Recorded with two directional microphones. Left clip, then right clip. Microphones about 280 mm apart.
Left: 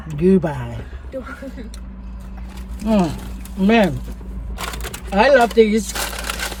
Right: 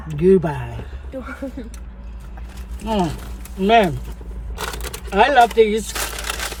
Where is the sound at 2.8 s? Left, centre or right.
Centre.